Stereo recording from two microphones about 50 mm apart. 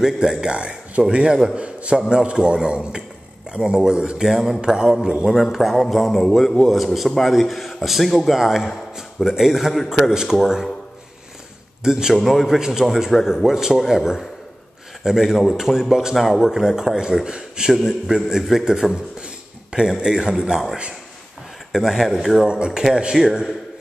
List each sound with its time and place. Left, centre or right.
0.0 s a man's voice: centre
5.3 s a man's voice: centre
11.8 s a man's voice: centre
12.2 s a man's voice: centre
19.2 s a sound: centre
20.0 s a man's voice: centre
21.7 s a man's voice: centre